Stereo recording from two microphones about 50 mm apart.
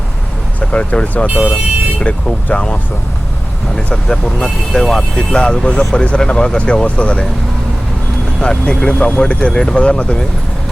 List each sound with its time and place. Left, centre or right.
0.6 s speech: left
1.3 s speech: right
2.0 s speech: left
3.9 s speech: centre
8.4 s speech: centre